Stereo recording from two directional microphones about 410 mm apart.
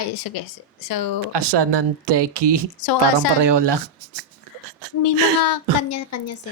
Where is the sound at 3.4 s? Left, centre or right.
Right.